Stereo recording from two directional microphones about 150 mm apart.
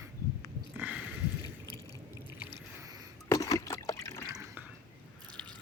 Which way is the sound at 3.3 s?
20° left (ahead or behind).